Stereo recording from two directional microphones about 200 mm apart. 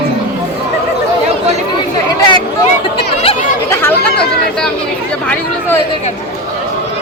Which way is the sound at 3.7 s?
10° left (ahead or behind).